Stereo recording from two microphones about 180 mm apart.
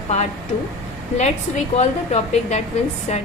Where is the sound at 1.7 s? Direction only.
40° left (ahead or behind).